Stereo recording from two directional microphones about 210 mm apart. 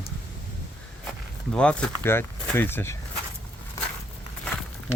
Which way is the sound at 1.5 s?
5° left (ahead or behind).